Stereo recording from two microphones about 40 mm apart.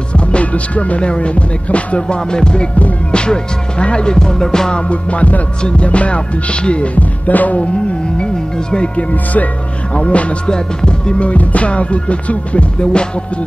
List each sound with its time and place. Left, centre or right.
0.1 s music: left
4.8 s music: left
8.7 s music: left
9.1 s music: left
9.9 s music: left